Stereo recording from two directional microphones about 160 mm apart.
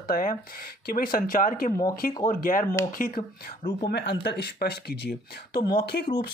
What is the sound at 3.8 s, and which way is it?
Speech, 90° left.